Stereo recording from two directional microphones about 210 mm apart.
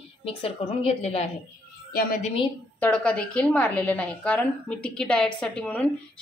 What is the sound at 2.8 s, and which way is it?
A woman's voice, 5° left (ahead or behind).